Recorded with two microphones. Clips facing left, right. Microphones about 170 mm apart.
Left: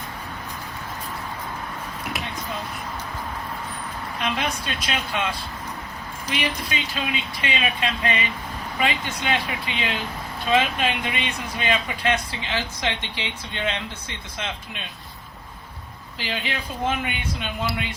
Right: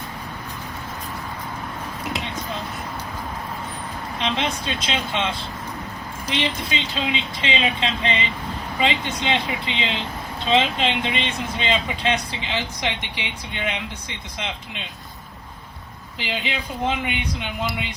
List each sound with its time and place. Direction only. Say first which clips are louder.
4.2 s speech: right 2 dB; 20° right (ahead or behind)
16.1 s speech: right 1 dB; 15° right (ahead or behind)